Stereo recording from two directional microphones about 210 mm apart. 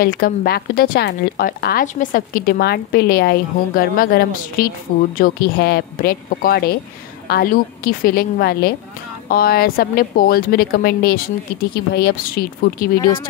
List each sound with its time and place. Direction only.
0.0 s speech: 45° left (ahead or behind)